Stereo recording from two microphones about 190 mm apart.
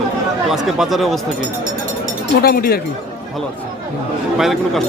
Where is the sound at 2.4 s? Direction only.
50° left (ahead or behind).